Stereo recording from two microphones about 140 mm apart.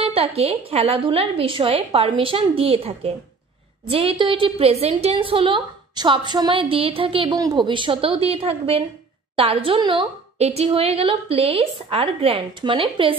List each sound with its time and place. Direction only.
0.1 s a woman's voice: 45° right (ahead or behind)
7.2 s a woman's voice: 25° right (ahead or behind)
10.4 s a woman's voice: 50° right (ahead or behind)